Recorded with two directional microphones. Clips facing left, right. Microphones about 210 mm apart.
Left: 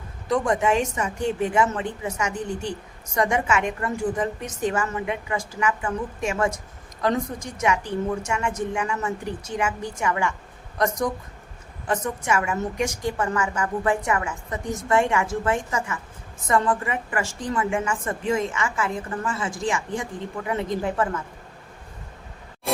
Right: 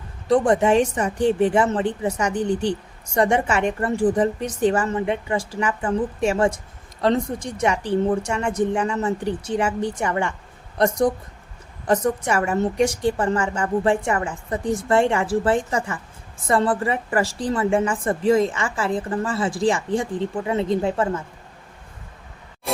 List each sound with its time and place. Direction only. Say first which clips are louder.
0.3 s a woman's voice: right 5 dB; 30° right (ahead or behind)